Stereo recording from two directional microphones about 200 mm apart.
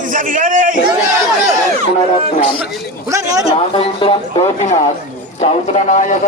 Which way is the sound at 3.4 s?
25° left (ahead or behind).